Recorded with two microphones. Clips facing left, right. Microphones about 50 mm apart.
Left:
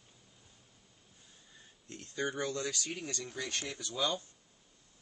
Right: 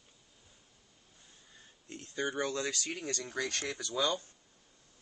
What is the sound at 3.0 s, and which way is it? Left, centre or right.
Speech, right.